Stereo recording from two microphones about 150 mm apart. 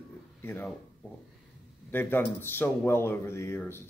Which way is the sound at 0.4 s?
15° left (ahead or behind).